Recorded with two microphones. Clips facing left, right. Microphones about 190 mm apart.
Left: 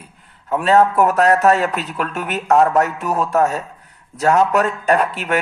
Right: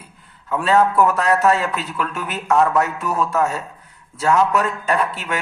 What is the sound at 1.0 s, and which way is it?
Speech, 40° left (ahead or behind).